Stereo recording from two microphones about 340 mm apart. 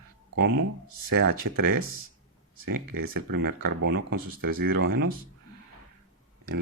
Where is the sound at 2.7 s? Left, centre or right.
Right.